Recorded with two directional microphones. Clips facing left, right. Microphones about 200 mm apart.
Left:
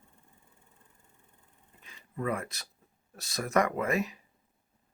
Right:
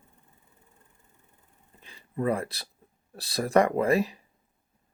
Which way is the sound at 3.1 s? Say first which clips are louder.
Right 5 dB; 35° right (ahead or behind).